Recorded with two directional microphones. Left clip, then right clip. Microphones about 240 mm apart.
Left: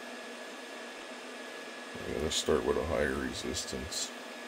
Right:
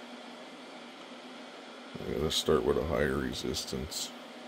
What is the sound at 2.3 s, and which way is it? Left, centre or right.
Speech, right.